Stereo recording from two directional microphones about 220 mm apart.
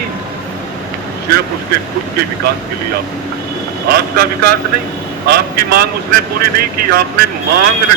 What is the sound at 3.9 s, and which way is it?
A man's voice, 45° right (ahead or behind).